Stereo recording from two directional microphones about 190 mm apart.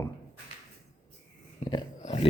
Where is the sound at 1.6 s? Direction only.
25° left (ahead or behind).